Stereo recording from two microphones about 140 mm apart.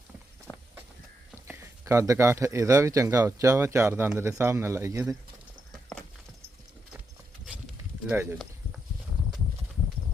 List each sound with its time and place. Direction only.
0.5 s walk: 20° left (ahead or behind)
1.5 s speech: 20° right (ahead or behind)
8.0 s speech: 15° right (ahead or behind)